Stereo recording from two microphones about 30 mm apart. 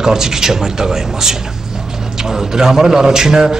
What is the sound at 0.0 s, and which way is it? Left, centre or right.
A woman's voice, centre.